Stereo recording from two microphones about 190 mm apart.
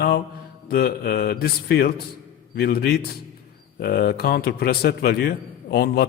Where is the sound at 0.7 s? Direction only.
50° left (ahead or behind).